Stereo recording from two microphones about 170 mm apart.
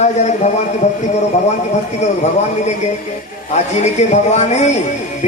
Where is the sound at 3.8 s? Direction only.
40° left (ahead or behind).